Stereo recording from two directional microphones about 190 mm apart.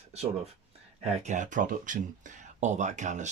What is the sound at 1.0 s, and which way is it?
Speech, 40° right (ahead or behind).